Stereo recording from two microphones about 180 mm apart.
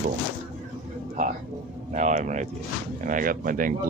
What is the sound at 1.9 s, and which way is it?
Speech, 45° right (ahead or behind).